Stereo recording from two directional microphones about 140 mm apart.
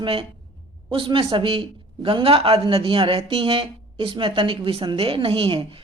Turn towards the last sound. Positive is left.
turn(degrees=-40)  # may be behind; listen again after turning